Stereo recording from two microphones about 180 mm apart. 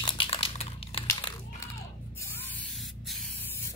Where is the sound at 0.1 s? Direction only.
30° left (ahead or behind).